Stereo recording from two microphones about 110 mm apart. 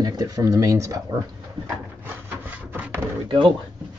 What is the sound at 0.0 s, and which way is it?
Speech, 35° right (ahead or behind).